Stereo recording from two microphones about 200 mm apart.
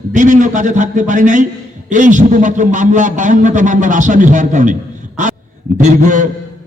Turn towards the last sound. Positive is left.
turn(degrees=-40)  # may be behind; listen again after turning